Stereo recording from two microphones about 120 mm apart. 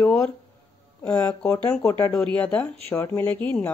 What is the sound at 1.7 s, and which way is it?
Speech, 20° left (ahead or behind).